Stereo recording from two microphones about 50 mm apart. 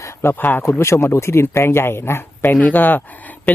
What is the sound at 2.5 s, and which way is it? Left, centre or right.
Speech, left.